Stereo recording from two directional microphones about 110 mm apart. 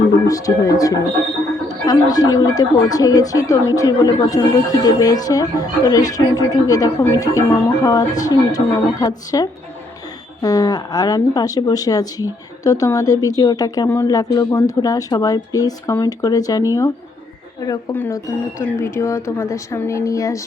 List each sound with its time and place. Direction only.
0.3 s speech: 35° left (ahead or behind)
18.6 s speech: 25° left (ahead or behind)